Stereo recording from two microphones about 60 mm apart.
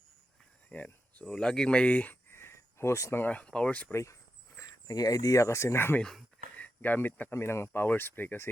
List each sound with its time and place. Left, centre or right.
1.2 s speech: centre
2.3 s a sound: left
3.2 s speech: left
3.9 s speech: left
6.0 s speech: centre
6.6 s speech: left
7.3 s speech: left